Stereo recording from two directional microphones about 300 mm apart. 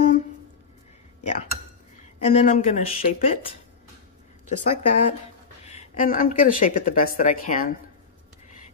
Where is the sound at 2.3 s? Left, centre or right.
Left.